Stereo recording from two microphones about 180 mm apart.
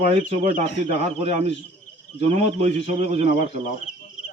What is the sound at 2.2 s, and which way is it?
Speech, 35° right (ahead or behind).